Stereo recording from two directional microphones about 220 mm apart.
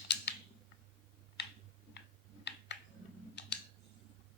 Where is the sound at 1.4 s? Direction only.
50° left (ahead or behind).